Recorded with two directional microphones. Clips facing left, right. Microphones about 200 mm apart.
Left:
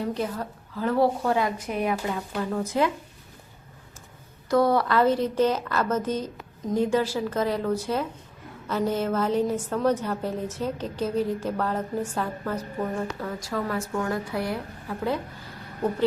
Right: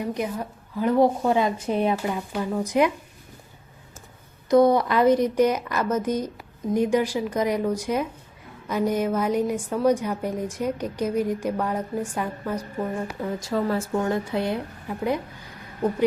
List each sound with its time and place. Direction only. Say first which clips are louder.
0.0 s speech: right 1 dB; 15° right (ahead or behind)
2.3 s a woman's voice: right 3 dB; 10° right (ahead or behind)
4.4 s a woman's voice: right 4 dB; 20° right (ahead or behind)